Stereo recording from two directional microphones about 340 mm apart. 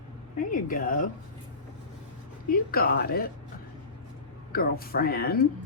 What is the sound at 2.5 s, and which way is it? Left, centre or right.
Speech, left.